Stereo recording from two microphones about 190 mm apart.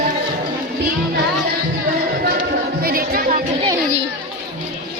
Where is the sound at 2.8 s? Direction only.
50° right (ahead or behind).